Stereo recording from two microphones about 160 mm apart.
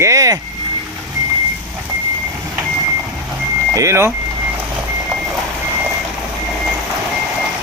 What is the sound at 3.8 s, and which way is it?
Speech, 15° right (ahead or behind).